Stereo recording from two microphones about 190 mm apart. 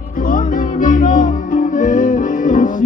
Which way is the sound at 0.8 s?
45° left (ahead or behind).